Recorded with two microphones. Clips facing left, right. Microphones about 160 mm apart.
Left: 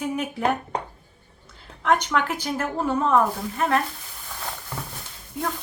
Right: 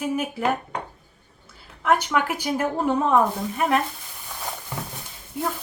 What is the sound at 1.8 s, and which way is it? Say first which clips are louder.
Speech: even; 5° right (ahead or behind).